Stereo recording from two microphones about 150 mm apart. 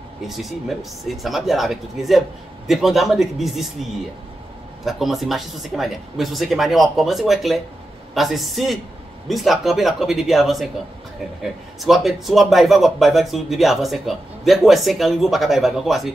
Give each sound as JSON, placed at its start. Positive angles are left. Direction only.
{"t": 0.3, "sound": "speech", "side_deg": 0}
{"t": 4.8, "sound": "speech", "side_deg": 0}
{"t": 11.8, "sound": "speech", "side_deg": 0}